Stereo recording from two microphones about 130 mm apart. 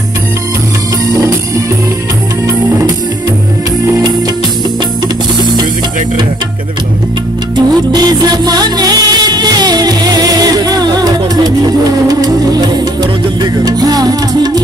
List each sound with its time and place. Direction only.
5.0 s music: 35° right (ahead or behind)
7.5 s music: 30° right (ahead or behind)